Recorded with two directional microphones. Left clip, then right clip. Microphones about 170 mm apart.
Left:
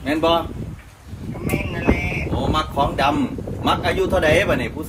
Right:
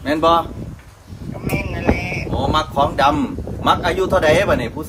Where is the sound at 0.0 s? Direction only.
10° right (ahead or behind).